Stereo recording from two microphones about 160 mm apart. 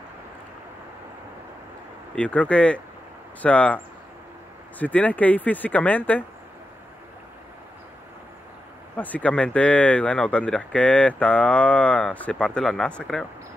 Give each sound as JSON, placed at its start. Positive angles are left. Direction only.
{"t": 2.1, "sound": "speech", "side_deg": 10}
{"t": 8.9, "sound": "speech", "side_deg": 10}